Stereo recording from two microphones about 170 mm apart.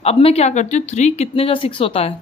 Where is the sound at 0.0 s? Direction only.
35° left (ahead or behind).